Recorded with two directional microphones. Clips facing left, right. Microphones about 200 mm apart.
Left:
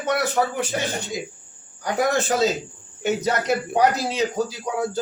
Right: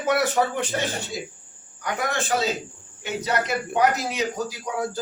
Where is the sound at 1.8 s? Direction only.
35° left (ahead or behind).